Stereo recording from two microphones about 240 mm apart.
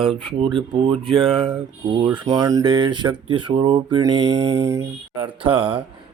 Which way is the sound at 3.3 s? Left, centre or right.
Right.